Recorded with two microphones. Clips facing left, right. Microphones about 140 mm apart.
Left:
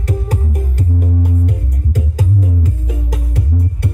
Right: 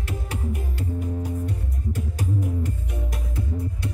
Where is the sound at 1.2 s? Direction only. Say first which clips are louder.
Left 8 dB; 70° left (ahead or behind).